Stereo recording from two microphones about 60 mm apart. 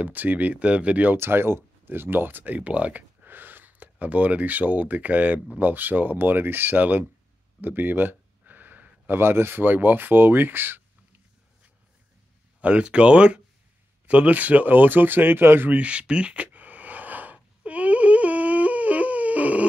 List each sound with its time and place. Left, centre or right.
0.0 s speech: right
1.1 s speech: right
12.5 s speech: right
15.7 s gasp: right